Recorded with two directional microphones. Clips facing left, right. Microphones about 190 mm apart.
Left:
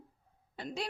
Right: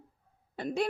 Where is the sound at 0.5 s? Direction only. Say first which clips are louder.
Right 8 dB; 55° right (ahead or behind).